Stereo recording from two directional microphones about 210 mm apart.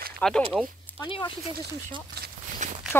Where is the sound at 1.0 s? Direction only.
25° left (ahead or behind).